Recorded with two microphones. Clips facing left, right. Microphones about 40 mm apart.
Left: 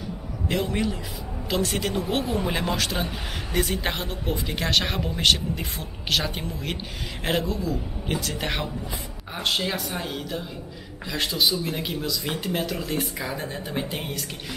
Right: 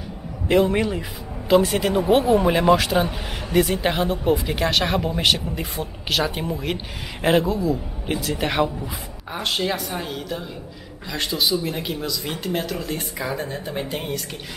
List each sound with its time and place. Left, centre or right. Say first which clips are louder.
0.7 s speech: right 5 dB; centre